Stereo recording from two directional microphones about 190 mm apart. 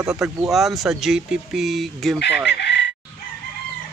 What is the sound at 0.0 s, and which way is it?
Speech, 5° right (ahead or behind).